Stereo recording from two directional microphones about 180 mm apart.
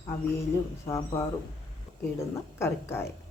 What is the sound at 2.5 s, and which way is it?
Speech, 15° left (ahead or behind).